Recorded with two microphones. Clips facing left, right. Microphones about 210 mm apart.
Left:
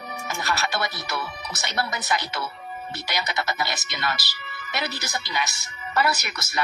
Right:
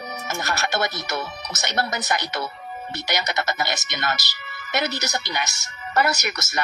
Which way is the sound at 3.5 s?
45° right (ahead or behind).